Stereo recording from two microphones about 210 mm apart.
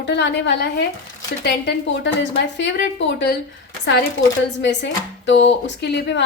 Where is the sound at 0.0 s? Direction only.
55° left (ahead or behind).